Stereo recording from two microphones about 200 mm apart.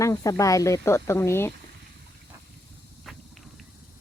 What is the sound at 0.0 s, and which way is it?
Speech, 15° left (ahead or behind).